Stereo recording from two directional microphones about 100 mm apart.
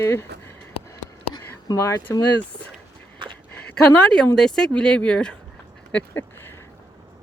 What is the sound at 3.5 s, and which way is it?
A woman's voice, 15° left (ahead or behind).